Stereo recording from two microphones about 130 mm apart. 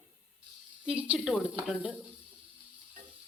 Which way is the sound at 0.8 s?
10° right (ahead or behind).